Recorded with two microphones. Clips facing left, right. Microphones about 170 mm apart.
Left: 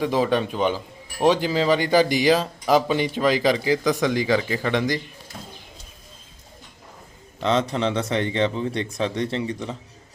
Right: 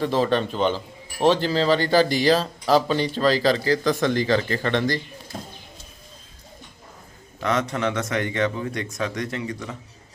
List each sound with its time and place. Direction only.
0.0 s speech: 10° left (ahead or behind)
7.3 s speech: 25° left (ahead or behind)